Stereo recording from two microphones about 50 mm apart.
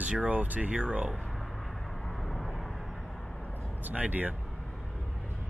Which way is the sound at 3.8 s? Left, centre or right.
Right.